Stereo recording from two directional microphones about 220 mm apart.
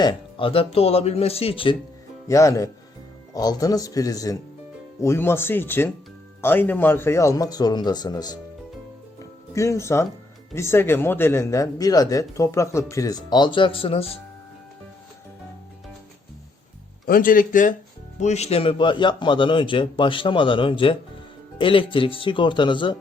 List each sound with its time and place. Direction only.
0.0 s a man's voice: 20° left (ahead or behind)
2.2 s speech: 15° left (ahead or behind)
9.5 s speech: 15° left (ahead or behind)
17.1 s a man's voice: 40° left (ahead or behind); by 23.0 s 20° left (ahead or behind)